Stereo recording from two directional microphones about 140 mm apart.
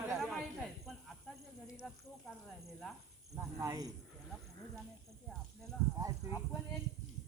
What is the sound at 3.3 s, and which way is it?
Speech, 20° right (ahead or behind).